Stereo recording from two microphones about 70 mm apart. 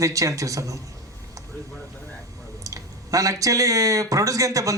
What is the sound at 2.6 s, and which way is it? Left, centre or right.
Speech, right.